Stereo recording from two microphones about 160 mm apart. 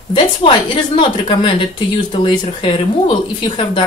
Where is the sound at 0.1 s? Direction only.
30° left (ahead or behind).